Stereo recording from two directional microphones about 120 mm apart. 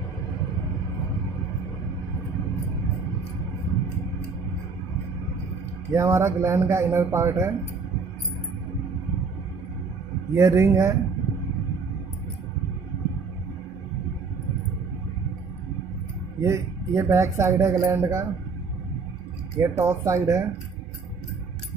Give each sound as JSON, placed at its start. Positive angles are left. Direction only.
{"t": 5.9, "sound": "a man's voice", "side_deg": -25}
{"t": 10.3, "sound": "a man's voice", "side_deg": -25}
{"t": 16.3, "sound": "speech", "side_deg": -25}
{"t": 19.6, "sound": "a man's voice", "side_deg": -20}